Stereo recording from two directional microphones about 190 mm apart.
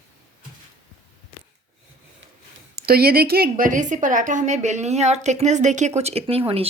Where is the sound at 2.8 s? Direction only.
55° right (ahead or behind).